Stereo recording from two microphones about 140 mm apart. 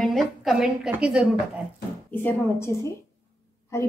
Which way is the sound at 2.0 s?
15° left (ahead or behind).